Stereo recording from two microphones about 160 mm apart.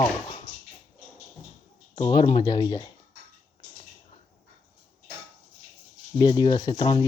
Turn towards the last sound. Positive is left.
turn(degrees=30)  # may be behind; listen again after turning